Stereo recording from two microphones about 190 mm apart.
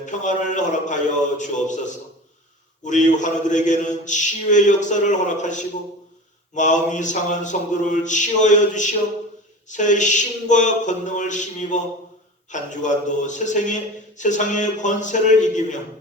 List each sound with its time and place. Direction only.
0.0 s a man's voice: 40° left (ahead or behind)
2.8 s a man's voice: 40° left (ahead or behind)